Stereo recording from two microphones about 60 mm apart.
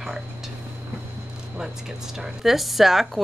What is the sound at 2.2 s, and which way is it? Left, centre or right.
A woman's voice, centre.